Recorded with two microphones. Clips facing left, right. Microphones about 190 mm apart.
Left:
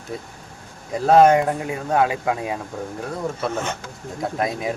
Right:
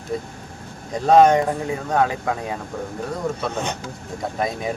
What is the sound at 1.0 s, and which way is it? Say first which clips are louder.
Speech: even; 5° left (ahead or behind).